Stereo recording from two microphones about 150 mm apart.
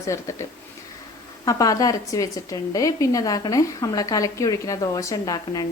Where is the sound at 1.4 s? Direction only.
20° left (ahead or behind).